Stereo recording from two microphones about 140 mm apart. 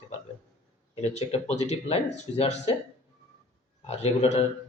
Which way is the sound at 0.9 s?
55° left (ahead or behind).